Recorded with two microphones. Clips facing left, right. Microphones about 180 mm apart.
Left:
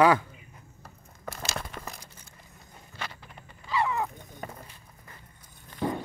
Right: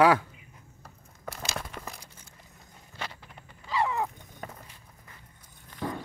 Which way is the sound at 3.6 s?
30° right (ahead or behind).